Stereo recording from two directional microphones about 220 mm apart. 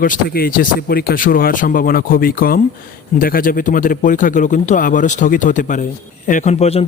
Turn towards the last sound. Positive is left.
turn(degrees=30)  # may be behind; listen again after turning